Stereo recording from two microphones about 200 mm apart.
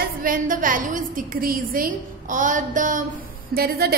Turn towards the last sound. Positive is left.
turn(degrees=-50)  # may be behind; listen again after turning